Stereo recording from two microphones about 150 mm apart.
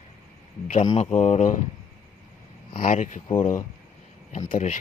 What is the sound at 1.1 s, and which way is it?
Speech, 50° left (ahead or behind).